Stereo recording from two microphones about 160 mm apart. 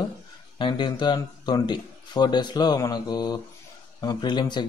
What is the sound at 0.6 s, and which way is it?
A man's voice, 30° left (ahead or behind).